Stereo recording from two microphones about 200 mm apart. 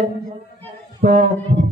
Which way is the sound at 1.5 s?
55° right (ahead or behind).